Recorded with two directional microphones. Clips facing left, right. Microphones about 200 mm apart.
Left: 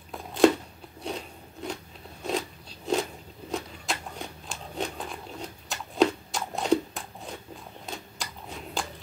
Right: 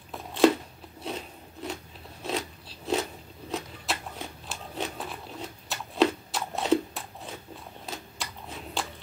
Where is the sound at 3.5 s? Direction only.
Centre (ahead or behind).